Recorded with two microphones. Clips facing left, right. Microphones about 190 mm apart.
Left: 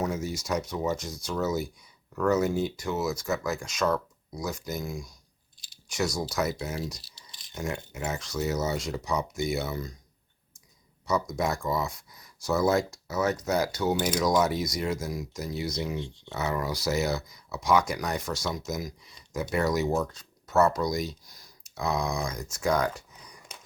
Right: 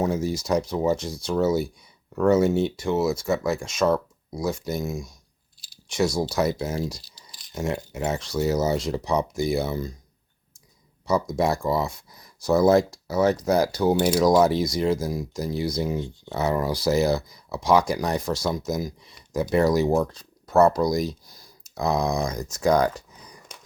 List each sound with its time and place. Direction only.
0.0 s speech: 30° right (ahead or behind)
7.3 s rattle: centre (ahead or behind)
7.5 s speech: 30° right (ahead or behind)
11.0 s speech: 30° right (ahead or behind)